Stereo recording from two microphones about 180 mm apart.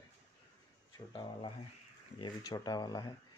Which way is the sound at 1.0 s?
30° left (ahead or behind).